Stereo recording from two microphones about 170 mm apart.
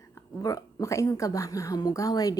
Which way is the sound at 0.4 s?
20° left (ahead or behind).